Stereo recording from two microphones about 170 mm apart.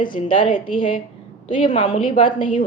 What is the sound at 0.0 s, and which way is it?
A woman's voice, 30° left (ahead or behind).